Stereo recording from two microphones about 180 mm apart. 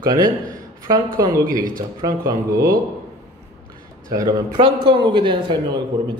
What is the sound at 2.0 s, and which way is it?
Speech, 20° right (ahead or behind).